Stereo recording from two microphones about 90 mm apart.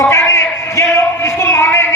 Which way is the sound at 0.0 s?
30° left (ahead or behind).